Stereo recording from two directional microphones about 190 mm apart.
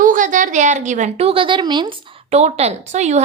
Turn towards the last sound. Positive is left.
turn(degrees=-35)  # may be behind; listen again after turning